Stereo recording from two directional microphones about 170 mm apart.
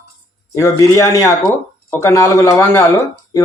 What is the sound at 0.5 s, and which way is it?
Speech, 20° left (ahead or behind).